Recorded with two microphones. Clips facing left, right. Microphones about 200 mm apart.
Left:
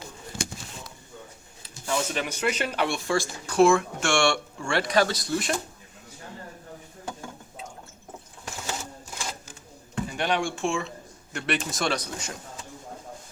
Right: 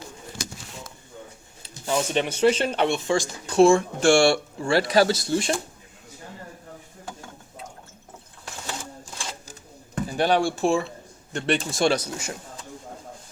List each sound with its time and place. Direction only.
1.6 s speech: 30° right (ahead or behind)
9.5 s a sound: 35° right (ahead or behind)
11.3 s speech: 30° right (ahead or behind)